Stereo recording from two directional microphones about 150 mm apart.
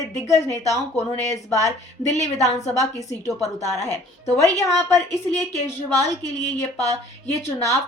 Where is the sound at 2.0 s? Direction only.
50° left (ahead or behind).